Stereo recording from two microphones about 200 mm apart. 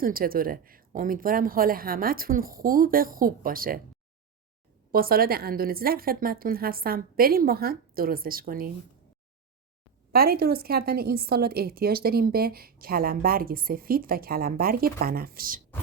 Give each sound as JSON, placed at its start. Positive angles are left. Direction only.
{"t": 0.0, "sound": "a woman's voice", "side_deg": -45}
{"t": 4.9, "sound": "a woman's voice", "side_deg": -45}
{"t": 10.1, "sound": "a woman's voice", "side_deg": -50}